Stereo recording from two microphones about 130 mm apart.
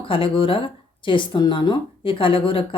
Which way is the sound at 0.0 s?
45° left (ahead or behind).